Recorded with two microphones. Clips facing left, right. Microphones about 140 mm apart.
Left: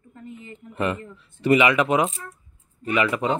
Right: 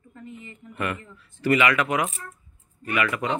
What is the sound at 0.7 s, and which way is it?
Speech, 25° left (ahead or behind).